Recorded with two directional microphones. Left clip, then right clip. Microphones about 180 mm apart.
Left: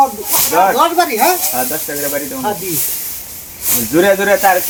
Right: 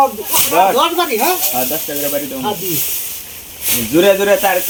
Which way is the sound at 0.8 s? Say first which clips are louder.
Left 2 dB; centre (ahead or behind).